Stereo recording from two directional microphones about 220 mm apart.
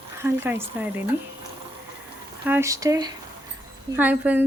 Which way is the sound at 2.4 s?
10° right (ahead or behind).